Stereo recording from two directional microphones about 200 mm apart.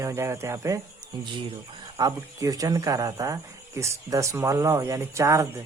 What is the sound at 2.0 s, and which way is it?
Speech, 20° right (ahead or behind).